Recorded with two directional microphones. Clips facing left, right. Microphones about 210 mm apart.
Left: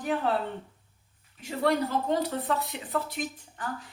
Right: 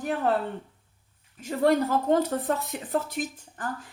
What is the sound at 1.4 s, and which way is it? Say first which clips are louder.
Speech: right 4 dB; 45° right (ahead or behind).